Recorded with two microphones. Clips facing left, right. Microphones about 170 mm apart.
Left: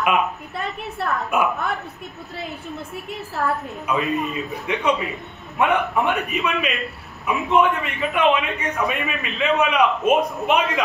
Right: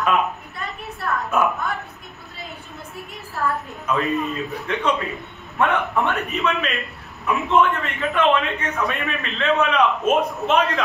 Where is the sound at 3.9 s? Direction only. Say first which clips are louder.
Right 1 dB; 10° left (ahead or behind).